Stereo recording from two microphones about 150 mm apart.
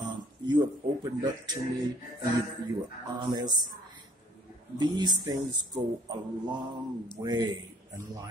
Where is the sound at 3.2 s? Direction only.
30° right (ahead or behind).